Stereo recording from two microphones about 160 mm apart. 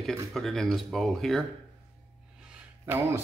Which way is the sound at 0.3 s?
Centre (ahead or behind).